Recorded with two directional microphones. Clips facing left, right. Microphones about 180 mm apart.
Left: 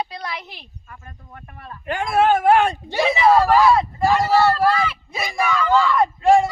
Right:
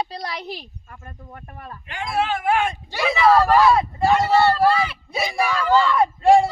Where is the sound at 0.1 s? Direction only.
35° right (ahead or behind).